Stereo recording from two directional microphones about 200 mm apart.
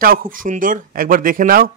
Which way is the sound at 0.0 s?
45° right (ahead or behind).